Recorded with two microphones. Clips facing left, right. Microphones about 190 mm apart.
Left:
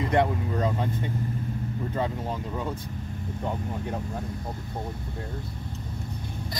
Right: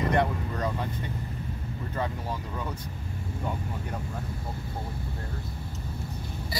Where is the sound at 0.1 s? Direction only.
20° left (ahead or behind).